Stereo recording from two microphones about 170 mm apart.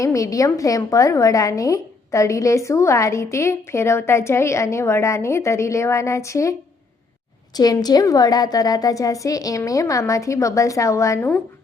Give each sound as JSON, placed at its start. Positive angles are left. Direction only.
{"t": 0.0, "sound": "a woman's voice", "side_deg": 20}
{"t": 7.5, "sound": "a woman's voice", "side_deg": 25}